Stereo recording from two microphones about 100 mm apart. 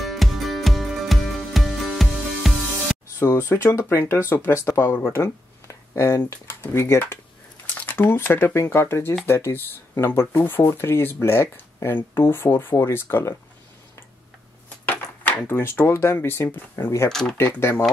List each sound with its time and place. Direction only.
0.0 s music: centre (ahead or behind)
3.2 s speech: 25° left (ahead or behind)
14.9 s speech: 20° left (ahead or behind)
17.1 s speech: 5° left (ahead or behind)
17.4 s speech: 25° left (ahead or behind)